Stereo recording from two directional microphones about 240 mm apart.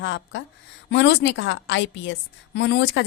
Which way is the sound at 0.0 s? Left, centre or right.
Left.